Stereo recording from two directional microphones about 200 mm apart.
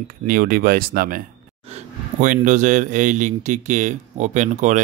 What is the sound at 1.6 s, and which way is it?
A man's voice, 35° right (ahead or behind).